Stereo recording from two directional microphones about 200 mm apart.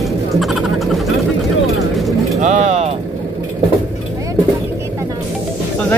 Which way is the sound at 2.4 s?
35° right (ahead or behind).